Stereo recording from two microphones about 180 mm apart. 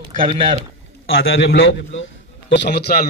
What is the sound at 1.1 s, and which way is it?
Speech, 90° left.